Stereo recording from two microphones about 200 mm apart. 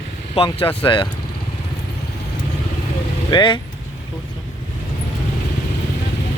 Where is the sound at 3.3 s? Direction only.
25° left (ahead or behind).